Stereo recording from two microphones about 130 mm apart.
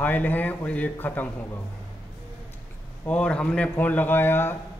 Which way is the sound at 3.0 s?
10° left (ahead or behind).